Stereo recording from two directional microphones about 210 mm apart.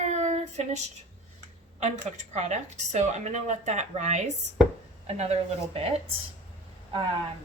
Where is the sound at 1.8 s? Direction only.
35° right (ahead or behind).